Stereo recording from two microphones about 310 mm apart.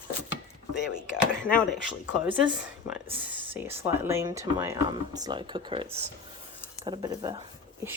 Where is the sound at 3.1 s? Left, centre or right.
Centre.